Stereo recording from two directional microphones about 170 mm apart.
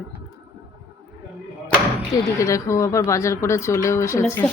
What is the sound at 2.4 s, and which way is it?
Speech, 20° left (ahead or behind).